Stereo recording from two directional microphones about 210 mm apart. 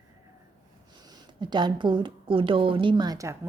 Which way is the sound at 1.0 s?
20° right (ahead or behind).